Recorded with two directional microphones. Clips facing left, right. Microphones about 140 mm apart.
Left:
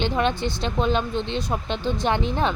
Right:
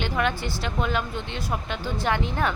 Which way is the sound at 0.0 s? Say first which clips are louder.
Left 3 dB; 25° left (ahead or behind).